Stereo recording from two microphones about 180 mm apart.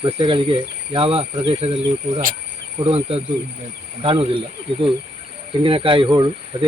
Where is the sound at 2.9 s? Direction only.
30° right (ahead or behind).